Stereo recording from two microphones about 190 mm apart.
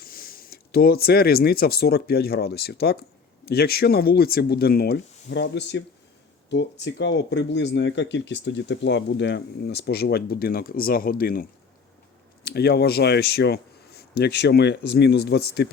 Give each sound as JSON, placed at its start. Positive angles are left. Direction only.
{"t": 0.0, "sound": "speech", "side_deg": 50}